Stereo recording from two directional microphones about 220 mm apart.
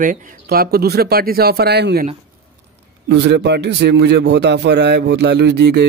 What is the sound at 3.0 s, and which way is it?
A man's voice, 50° right (ahead or behind).